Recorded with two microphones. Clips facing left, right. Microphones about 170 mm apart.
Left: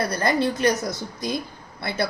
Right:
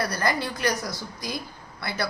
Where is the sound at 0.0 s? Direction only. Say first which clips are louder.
Left 4 dB; 25° left (ahead or behind).